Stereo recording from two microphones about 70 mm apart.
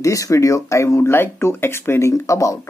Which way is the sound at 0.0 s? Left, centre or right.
Left.